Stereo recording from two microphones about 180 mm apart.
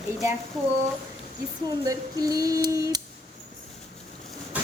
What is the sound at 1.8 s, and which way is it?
Speech, 20° right (ahead or behind).